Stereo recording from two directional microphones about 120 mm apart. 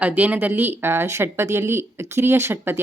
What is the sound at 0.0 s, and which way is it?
Speech, 15° right (ahead or behind).